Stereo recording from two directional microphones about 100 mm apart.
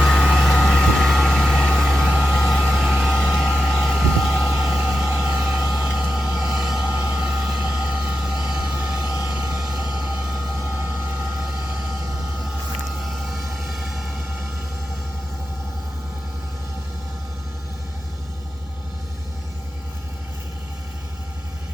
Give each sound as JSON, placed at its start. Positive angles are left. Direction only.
{"t": 0.0, "sound": "vehicle", "side_deg": 0}
{"t": 5.0, "sound": "vehicle", "side_deg": -15}
{"t": 13.0, "sound": "music", "side_deg": 0}